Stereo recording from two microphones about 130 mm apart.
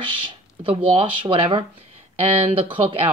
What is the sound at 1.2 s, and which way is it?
Speech, 45° right (ahead or behind).